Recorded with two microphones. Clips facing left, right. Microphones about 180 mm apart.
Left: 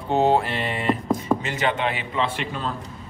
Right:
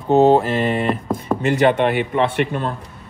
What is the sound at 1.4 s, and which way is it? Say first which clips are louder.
A man's voice: right 9 dB; 55° right (ahead or behind).